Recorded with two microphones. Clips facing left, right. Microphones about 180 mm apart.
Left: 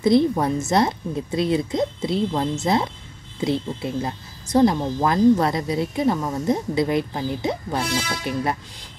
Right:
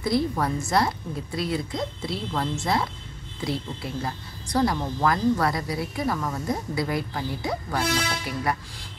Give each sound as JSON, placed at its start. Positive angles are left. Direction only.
{"t": 0.0, "sound": "speech", "side_deg": 20}